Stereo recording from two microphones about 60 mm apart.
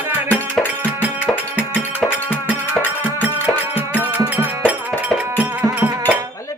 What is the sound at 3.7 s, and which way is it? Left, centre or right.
Music, left.